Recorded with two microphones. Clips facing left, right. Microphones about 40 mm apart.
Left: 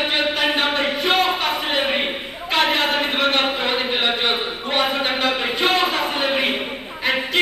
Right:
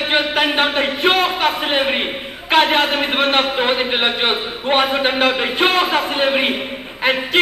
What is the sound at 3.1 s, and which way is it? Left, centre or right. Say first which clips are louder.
A man's voice: right 3 dB; right.